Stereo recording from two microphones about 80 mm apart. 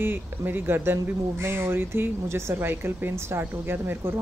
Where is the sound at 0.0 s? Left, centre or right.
Right.